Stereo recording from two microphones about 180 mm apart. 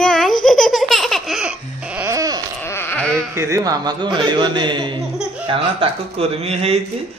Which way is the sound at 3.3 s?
15° right (ahead or behind).